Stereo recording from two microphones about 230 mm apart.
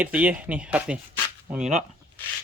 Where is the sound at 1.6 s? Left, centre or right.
Right.